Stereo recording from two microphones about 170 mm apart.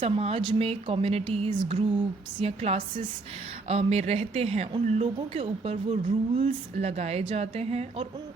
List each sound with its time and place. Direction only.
0.0 s speech: 35° right (ahead or behind)